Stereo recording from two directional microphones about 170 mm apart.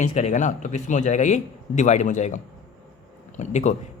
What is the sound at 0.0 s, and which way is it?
Speech, 40° left (ahead or behind).